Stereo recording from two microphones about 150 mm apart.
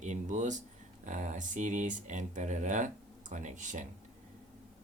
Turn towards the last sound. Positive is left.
turn(degrees=-55)  # may be behind; listen again after turning